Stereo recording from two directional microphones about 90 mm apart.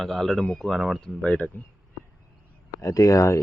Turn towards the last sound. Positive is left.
turn(degrees=35)  # may be behind; listen again after turning